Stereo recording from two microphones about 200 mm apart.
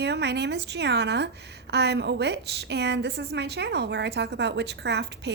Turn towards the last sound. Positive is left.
turn(degrees=-60)  # may be behind; listen again after turning